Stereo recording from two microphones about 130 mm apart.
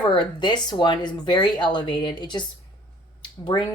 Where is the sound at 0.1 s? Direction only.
35° left (ahead or behind).